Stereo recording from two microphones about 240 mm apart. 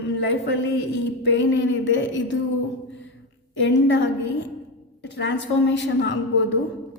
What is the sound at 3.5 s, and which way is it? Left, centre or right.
Speech, left.